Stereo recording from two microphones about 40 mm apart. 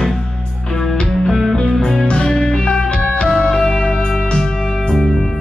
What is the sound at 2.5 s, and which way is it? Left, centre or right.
Music, left.